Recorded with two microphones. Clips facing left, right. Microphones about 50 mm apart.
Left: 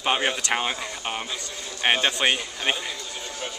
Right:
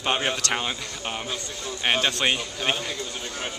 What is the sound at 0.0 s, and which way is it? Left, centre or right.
Speech, centre.